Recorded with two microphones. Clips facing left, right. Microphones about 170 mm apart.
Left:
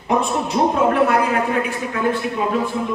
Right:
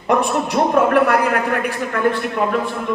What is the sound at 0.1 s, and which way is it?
A man's voice, 60° right (ahead or behind).